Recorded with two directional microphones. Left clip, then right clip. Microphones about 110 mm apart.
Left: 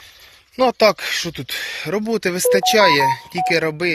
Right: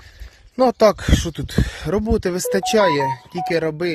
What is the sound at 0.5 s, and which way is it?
Speech, 90° right.